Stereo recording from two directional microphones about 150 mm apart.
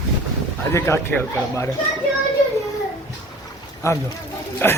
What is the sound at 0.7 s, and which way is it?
Speech, 20° left (ahead or behind).